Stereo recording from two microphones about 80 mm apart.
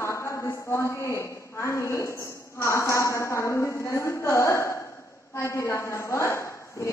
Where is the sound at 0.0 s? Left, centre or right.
Left.